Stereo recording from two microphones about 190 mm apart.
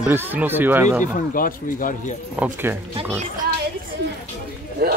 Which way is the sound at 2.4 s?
10° right (ahead or behind).